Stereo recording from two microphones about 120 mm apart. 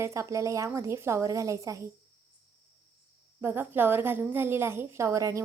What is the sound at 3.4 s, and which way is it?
A woman's voice, 20° right (ahead or behind).